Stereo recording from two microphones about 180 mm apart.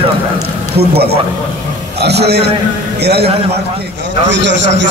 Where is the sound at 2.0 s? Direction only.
65° right (ahead or behind).